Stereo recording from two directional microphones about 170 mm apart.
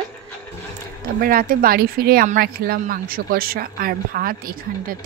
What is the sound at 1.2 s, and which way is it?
Speech, 55° right (ahead or behind).